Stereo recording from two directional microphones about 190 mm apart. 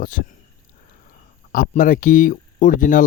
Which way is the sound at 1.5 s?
45° left (ahead or behind).